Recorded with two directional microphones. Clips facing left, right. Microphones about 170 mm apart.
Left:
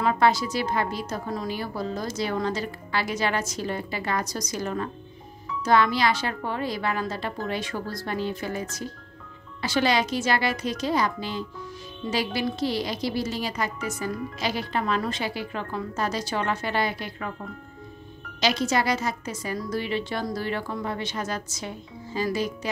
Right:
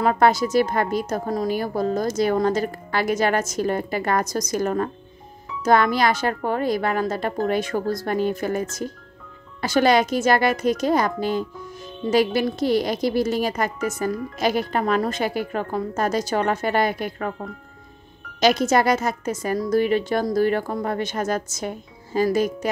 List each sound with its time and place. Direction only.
0.0 s a woman's voice: 45° right (ahead or behind)
18.4 s a woman's voice: 50° right (ahead or behind)